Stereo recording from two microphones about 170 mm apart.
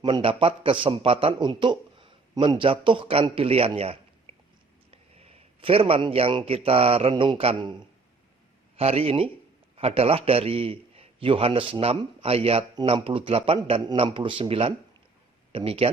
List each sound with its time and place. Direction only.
0.0 s a man's voice: 30° right (ahead or behind)